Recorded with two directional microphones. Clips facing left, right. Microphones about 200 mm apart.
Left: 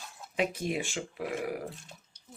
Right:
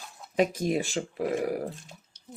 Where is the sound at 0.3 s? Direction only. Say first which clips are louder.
Right 6 dB; 40° right (ahead or behind).